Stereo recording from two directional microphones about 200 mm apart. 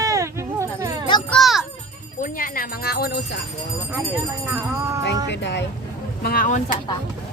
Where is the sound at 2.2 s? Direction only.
45° left (ahead or behind).